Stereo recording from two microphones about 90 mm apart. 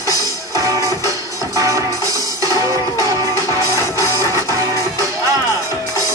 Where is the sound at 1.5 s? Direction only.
35° right (ahead or behind).